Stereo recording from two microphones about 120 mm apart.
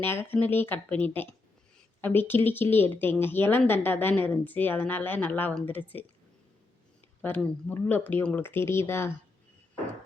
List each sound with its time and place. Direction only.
0.0 s speech: 20° left (ahead or behind)
7.2 s speech: 15° left (ahead or behind)